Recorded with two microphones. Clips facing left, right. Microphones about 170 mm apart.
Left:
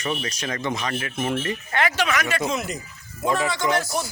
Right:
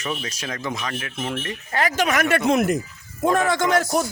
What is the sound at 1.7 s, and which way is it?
A man's voice, 40° right (ahead or behind).